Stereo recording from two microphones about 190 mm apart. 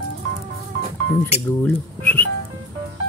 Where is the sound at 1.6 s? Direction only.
10° left (ahead or behind).